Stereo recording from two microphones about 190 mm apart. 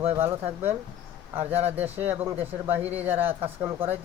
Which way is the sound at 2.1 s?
10° right (ahead or behind).